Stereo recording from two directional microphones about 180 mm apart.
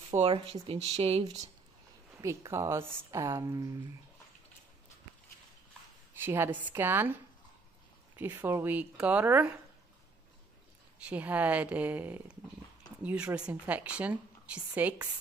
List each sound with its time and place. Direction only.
0.1 s speech: 35° right (ahead or behind)
2.1 s a woman's voice: 15° right (ahead or behind)
6.1 s a woman's voice: 10° right (ahead or behind)
8.2 s a woman's voice: 10° right (ahead or behind)
11.1 s a woman's voice: 10° right (ahead or behind)